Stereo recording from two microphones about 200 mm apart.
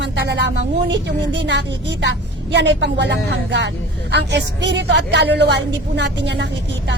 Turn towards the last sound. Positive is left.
turn(degrees=-60)  # may be behind; listen again after turning